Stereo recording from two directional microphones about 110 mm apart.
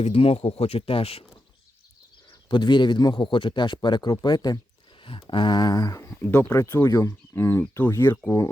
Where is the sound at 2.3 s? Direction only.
45° left (ahead or behind).